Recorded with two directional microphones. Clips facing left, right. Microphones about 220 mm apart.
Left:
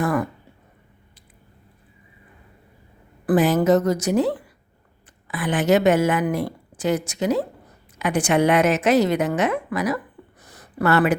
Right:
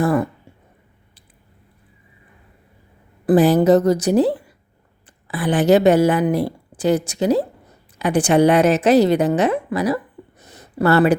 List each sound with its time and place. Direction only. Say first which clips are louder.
0.0 s speech: right 4 dB; 30° right (ahead or behind)
3.2 s speech: right 4 dB; 35° right (ahead or behind)
10.4 s a sound: right 4 dB; 25° right (ahead or behind)